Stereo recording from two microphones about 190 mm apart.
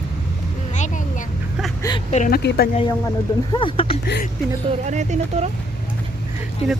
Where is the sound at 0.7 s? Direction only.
40° left (ahead or behind).